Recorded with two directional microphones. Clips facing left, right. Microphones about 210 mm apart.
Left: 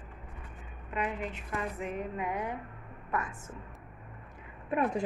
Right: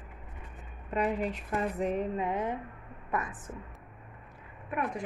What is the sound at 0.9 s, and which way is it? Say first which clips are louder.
A woman's voice: right 5 dB; 40° right (ahead or behind).